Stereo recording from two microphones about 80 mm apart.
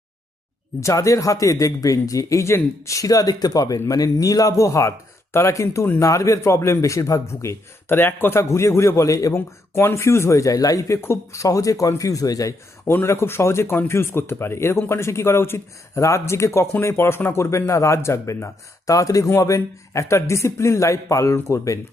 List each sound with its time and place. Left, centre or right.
0.8 s a man's voice: left
7.9 s a man's voice: left
12.8 s a man's voice: left